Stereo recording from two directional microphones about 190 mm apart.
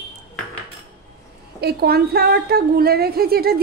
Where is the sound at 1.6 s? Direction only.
55° right (ahead or behind).